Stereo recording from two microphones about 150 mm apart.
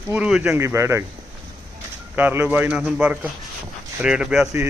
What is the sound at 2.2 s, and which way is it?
A man's voice, 10° right (ahead or behind).